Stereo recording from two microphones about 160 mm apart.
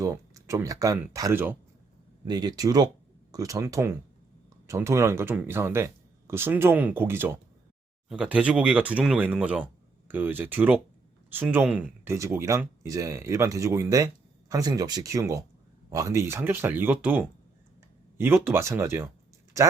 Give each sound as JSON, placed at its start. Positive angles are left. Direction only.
{"t": 0.0, "sound": "speech", "side_deg": -20}
{"t": 2.2, "sound": "speech", "side_deg": -25}